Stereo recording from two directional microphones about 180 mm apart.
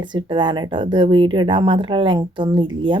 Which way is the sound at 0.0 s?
25° right (ahead or behind).